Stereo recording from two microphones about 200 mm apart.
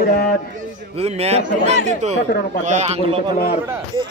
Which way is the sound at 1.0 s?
30° right (ahead or behind).